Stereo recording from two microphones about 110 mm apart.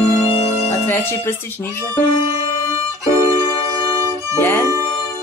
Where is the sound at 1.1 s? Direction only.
20° left (ahead or behind).